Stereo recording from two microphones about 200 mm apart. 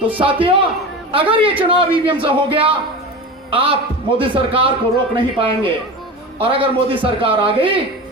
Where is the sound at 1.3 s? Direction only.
25° right (ahead or behind).